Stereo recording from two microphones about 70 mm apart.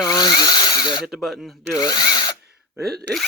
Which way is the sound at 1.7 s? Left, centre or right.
Left.